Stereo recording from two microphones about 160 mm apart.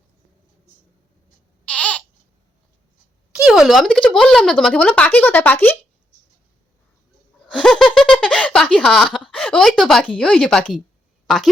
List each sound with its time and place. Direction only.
1.6 s baby cry: 5° left (ahead or behind)
3.4 s speech: 5° right (ahead or behind)
7.5 s a sound: 5° left (ahead or behind)